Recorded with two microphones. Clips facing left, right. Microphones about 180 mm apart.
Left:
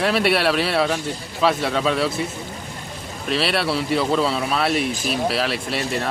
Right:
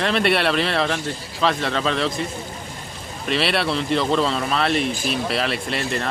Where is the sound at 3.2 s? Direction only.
Centre (ahead or behind).